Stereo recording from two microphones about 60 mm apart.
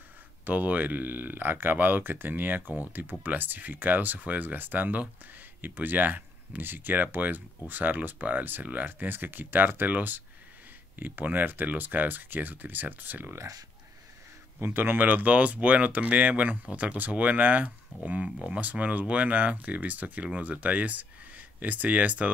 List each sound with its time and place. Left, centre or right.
0.5 s speech: right
13.4 s speech: right
14.6 s speech: right